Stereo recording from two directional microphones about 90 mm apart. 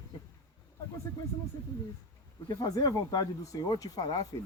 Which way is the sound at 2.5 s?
45° left (ahead or behind).